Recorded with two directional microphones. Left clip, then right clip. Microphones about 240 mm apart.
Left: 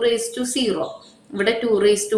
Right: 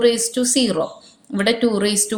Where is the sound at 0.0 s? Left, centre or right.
Right.